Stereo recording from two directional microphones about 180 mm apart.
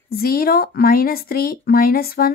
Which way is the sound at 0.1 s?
55° left (ahead or behind).